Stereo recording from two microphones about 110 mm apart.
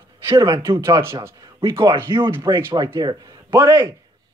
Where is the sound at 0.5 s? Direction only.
30° right (ahead or behind).